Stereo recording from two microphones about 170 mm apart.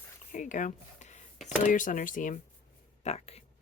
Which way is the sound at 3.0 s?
40° left (ahead or behind).